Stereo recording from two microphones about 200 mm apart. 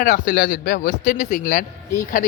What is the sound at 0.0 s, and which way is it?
A man's voice, 40° left (ahead or behind).